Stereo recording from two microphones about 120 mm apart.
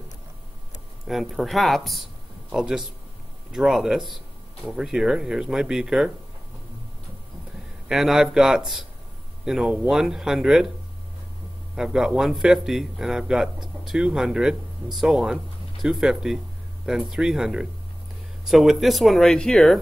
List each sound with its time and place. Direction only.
1.0 s speech: centre (ahead or behind)
7.9 s speech: 5° right (ahead or behind)
11.7 s speech: 5° right (ahead or behind)